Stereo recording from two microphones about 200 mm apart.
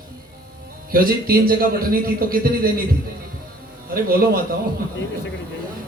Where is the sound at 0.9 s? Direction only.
45° right (ahead or behind).